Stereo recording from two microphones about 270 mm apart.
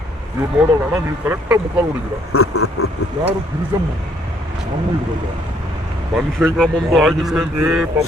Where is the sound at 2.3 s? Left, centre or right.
Left.